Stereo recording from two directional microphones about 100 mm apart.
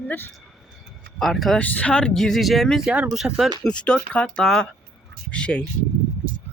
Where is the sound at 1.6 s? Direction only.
15° left (ahead or behind); by 3.5 s 5° right (ahead or behind).